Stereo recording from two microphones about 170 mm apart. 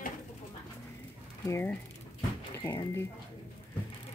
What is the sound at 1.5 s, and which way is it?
Speech, 10° left (ahead or behind).